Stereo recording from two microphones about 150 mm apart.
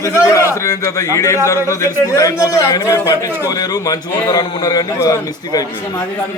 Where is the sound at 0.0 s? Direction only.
20° left (ahead or behind).